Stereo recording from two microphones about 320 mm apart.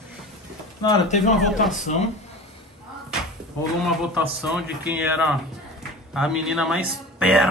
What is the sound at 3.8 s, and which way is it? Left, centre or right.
Speech, centre.